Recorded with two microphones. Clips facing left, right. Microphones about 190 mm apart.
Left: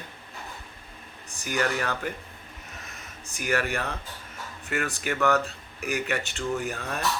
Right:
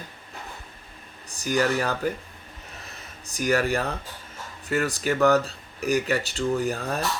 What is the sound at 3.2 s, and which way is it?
A man's voice, 35° right (ahead or behind).